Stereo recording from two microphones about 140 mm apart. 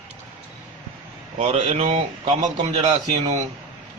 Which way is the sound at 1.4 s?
45° right (ahead or behind).